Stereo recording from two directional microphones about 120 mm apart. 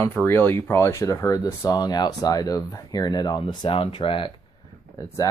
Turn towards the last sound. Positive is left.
turn(degrees=30)  # may be behind; listen again after turning